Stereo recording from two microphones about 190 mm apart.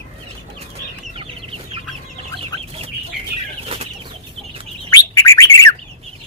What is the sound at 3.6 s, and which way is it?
Bird flight, 30° right (ahead or behind).